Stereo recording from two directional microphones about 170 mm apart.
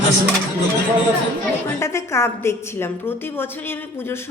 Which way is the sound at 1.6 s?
15° left (ahead or behind).